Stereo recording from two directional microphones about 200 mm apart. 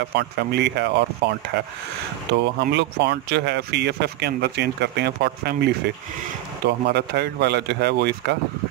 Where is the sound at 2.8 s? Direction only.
55° right (ahead or behind).